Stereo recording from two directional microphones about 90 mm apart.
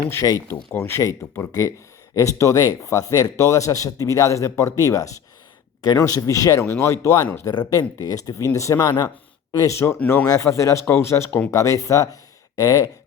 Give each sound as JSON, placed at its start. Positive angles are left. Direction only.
{"t": 0.1, "sound": "speech", "side_deg": 40}
{"t": 0.4, "sound": "speech", "side_deg": 30}
{"t": 9.7, "sound": "speech", "side_deg": 30}
{"t": 10.0, "sound": "speech", "side_deg": 15}
{"t": 10.2, "sound": "speech", "side_deg": 35}